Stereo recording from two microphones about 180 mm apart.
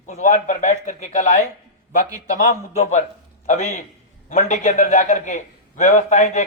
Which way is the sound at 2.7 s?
40° left (ahead or behind).